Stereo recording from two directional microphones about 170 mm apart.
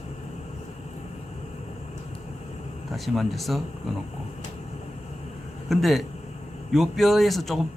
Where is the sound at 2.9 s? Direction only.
Centre (ahead or behind).